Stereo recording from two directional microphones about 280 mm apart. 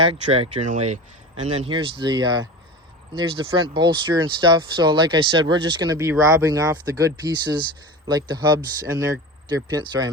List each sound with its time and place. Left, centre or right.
0.0 s speech: centre